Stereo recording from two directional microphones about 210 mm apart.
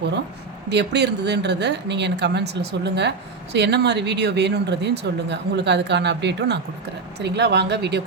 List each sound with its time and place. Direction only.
0.7 s speech: 55° right (ahead or behind)